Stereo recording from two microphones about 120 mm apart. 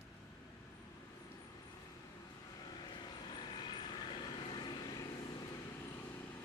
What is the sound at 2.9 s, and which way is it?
Vehicle, 40° left (ahead or behind).